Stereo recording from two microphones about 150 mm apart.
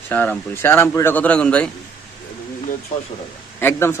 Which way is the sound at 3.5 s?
15° left (ahead or behind).